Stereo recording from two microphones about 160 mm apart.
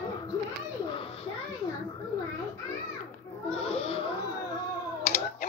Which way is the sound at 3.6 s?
40° left (ahead or behind).